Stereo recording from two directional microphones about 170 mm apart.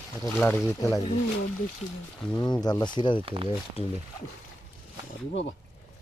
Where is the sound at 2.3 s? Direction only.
25° left (ahead or behind).